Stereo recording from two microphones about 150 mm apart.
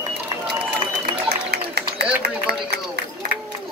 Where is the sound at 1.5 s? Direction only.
90° right.